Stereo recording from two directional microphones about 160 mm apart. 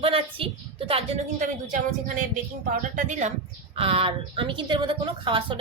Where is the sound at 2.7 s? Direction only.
55° right (ahead or behind).